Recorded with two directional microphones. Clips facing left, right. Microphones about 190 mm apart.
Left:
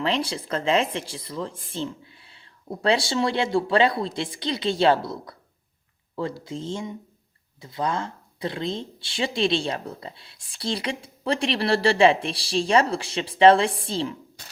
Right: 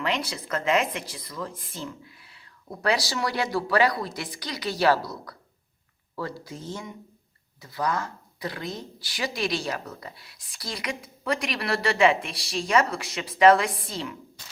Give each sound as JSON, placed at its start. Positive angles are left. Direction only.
{"t": 0.0, "sound": "speech", "side_deg": 30}
{"t": 6.4, "sound": "speech", "side_deg": 25}